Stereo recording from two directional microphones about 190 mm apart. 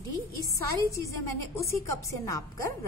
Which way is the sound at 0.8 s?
15° left (ahead or behind).